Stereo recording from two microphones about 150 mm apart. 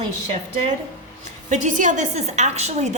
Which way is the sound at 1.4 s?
55° right (ahead or behind).